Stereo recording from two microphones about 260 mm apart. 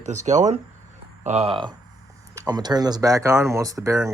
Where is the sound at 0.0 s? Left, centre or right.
Right.